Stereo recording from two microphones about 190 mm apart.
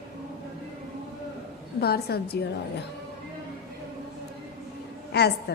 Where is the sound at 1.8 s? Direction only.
55° left (ahead or behind).